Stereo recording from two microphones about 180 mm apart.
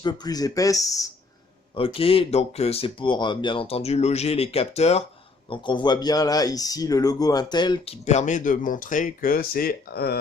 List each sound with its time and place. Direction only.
0.0 s speech: 25° left (ahead or behind)
1.7 s speech: 30° left (ahead or behind)
5.5 s speech: 25° left (ahead or behind)
8.0 s speech: 40° left (ahead or behind); by 10.2 s 60° left (ahead or behind)